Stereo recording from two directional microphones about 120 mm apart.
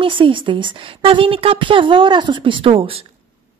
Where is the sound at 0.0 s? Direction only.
45° right (ahead or behind).